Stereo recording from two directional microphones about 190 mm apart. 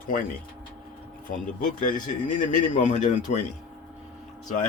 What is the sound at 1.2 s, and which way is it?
Speech, 45° left (ahead or behind).